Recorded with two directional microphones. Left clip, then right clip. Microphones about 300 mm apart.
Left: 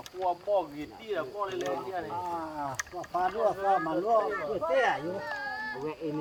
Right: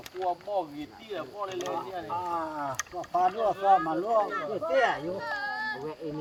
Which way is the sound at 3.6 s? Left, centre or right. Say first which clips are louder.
Right 9 dB; centre.